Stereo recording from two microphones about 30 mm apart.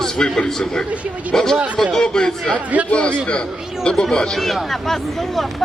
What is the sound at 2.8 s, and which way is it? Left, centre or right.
Speech, left.